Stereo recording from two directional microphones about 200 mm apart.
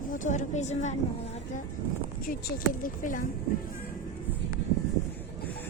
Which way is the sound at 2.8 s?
40° left (ahead or behind).